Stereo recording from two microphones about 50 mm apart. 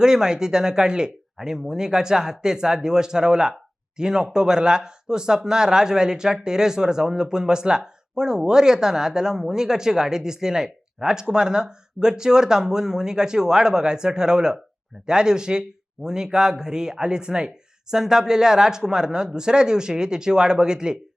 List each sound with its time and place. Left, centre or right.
0.0 s speech: centre